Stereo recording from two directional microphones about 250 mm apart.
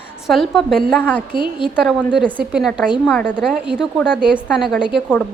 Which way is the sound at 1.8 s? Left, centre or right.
Centre.